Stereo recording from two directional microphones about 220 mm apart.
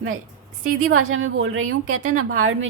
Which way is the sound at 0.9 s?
70° right (ahead or behind).